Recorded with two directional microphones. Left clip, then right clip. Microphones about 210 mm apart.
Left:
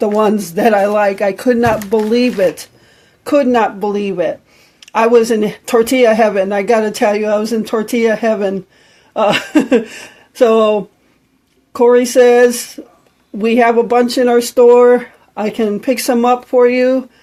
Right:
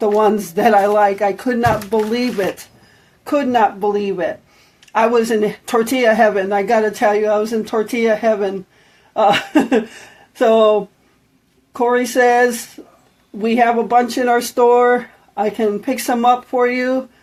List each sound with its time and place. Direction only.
0.0 s speech: 45° left (ahead or behind)
11.8 s speech: 45° left (ahead or behind)